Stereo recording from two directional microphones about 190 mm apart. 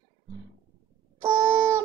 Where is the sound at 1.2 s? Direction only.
15° right (ahead or behind).